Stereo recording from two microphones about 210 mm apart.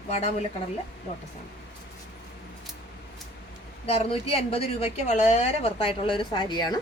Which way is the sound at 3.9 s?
30° left (ahead or behind).